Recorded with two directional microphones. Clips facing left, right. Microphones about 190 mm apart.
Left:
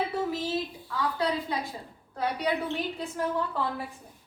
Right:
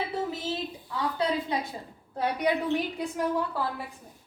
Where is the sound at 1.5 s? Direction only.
20° right (ahead or behind).